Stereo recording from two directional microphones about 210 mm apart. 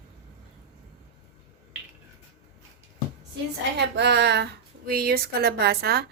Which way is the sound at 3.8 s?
55° right (ahead or behind).